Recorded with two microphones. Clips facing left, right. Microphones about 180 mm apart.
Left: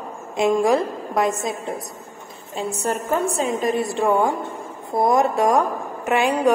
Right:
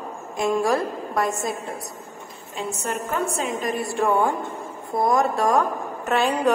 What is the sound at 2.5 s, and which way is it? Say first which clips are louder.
Speech: left 4 dB; 35° left (ahead or behind).